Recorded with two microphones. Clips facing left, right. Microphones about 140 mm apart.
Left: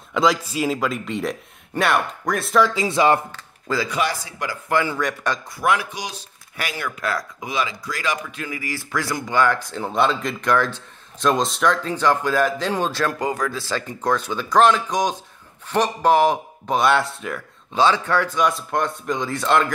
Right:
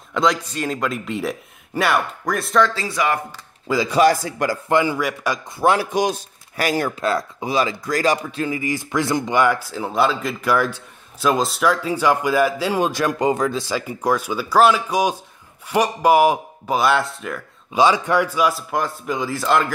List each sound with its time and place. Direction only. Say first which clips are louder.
0.1 s speech: even; centre (ahead or behind)
2.7 s speech: left 4 dB; 20° left (ahead or behind)
3.3 s speech: right 3 dB; 15° right (ahead or behind)
3.9 s a man's voice: right 9 dB; 45° right (ahead or behind)
4.6 s speech: right 1 dB; 15° right (ahead or behind)
5.6 s speech: right 4 dB; 30° right (ahead or behind)
5.9 s speech: right 12 dB; 50° right (ahead or behind)
7.0 s speech: right 5 dB; 25° right (ahead or behind); by 17.4 s centre (ahead or behind)
17.7 s speech: right 2 dB; 10° right (ahead or behind)